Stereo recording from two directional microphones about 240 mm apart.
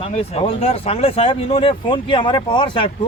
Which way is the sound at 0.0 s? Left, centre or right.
Left.